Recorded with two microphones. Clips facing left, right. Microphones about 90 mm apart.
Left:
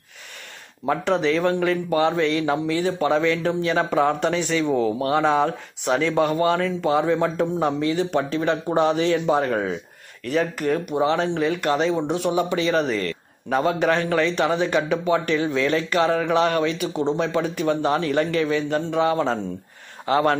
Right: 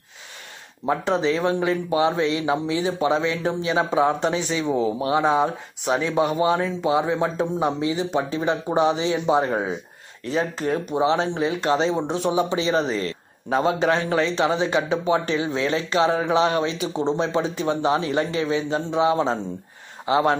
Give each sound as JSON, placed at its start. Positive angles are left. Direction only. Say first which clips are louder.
{"t": 0.8, "sound": "speech", "louder": "left 1 dB", "side_deg": -20}